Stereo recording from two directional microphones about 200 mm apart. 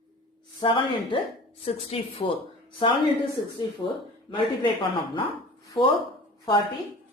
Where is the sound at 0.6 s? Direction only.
25° left (ahead or behind).